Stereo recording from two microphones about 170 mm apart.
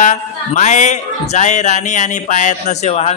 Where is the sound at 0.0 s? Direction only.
45° left (ahead or behind).